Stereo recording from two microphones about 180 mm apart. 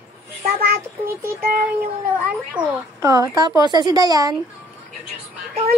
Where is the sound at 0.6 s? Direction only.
55° right (ahead or behind).